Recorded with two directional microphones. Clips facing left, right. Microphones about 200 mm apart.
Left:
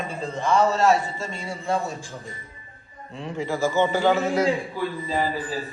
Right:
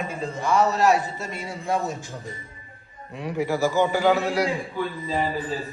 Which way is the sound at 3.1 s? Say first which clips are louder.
Right 3 dB; 15° right (ahead or behind).